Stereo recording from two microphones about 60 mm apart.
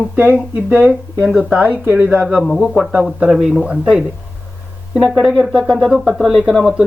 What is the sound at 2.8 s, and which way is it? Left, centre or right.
Speech, centre.